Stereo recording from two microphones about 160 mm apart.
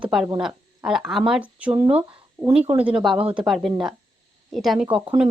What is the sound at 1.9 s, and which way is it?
Speech, 40° right (ahead or behind).